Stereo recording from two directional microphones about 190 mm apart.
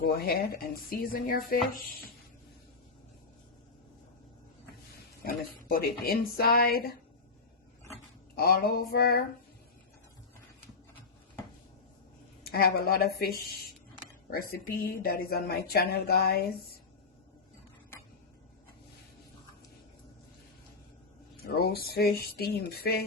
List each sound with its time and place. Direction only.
0.0 s a woman's voice: 55° left (ahead or behind)
5.2 s a woman's voice: 50° left (ahead or behind)
8.4 s a woman's voice: 55° left (ahead or behind)
12.5 s a woman's voice: 55° left (ahead or behind)
21.4 s speech: 55° left (ahead or behind)